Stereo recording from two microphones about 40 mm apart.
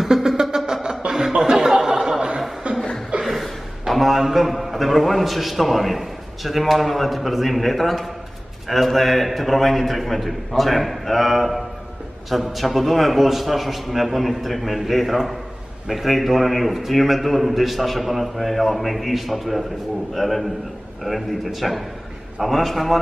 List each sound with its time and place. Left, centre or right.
0.0 s music: centre
1.0 s a sound: centre
2.6 s chuckle: right
3.3 s a man's voice: centre